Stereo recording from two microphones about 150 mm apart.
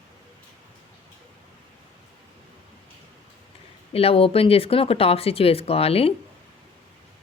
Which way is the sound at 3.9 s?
40° left (ahead or behind).